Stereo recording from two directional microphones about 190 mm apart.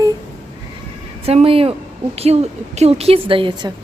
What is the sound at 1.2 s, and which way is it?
A woman's voice, 30° right (ahead or behind).